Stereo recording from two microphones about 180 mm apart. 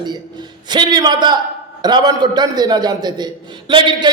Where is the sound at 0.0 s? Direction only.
25° right (ahead or behind).